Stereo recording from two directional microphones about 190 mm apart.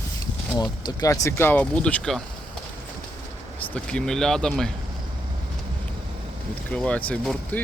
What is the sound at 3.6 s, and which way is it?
Speech, 10° left (ahead or behind).